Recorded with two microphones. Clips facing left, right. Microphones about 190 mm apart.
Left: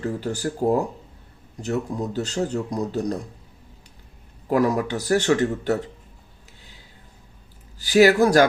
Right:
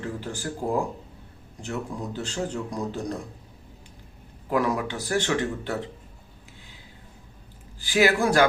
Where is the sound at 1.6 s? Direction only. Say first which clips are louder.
Left 6 dB; 40° left (ahead or behind).